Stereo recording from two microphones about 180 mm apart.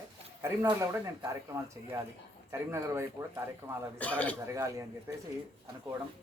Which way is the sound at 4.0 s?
10° left (ahead or behind).